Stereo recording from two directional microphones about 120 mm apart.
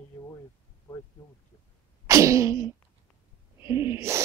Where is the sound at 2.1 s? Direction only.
25° right (ahead or behind).